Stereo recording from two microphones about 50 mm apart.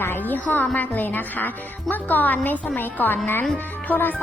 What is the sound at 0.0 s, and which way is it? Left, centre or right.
Speech, left.